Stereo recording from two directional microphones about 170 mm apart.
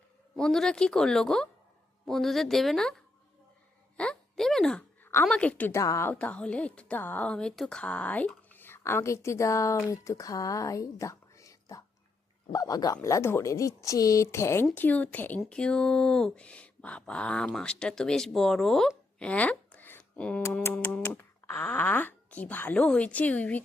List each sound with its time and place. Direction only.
0.3 s speech: 5° left (ahead or behind)
3.9 s a sound: 5° left (ahead or behind)
5.2 s speech: 5° left (ahead or behind)